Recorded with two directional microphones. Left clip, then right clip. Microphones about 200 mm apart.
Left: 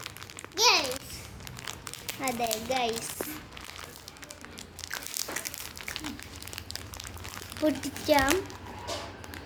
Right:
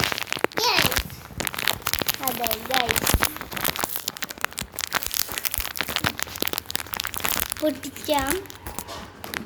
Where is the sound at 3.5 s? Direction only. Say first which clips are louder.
Right 15 dB; 50° right (ahead or behind).